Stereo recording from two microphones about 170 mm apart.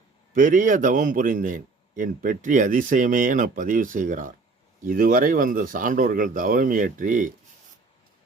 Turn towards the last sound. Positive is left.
turn(degrees=-50)  # may be behind; listen again after turning